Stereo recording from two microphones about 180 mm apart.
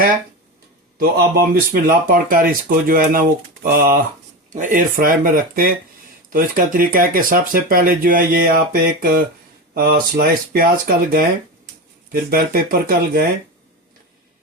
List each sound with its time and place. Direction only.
0.9 s speech: 55° right (ahead or behind)